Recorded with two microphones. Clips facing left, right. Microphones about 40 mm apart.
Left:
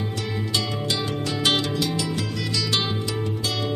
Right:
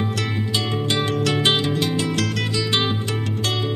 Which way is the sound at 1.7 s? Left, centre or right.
Right.